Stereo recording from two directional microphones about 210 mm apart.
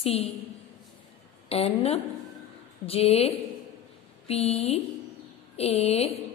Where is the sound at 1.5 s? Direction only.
30° left (ahead or behind).